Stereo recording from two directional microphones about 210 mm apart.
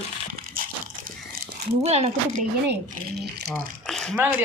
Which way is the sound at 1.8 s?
30° right (ahead or behind).